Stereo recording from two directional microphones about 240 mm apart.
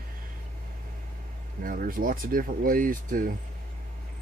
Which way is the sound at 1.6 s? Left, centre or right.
Right.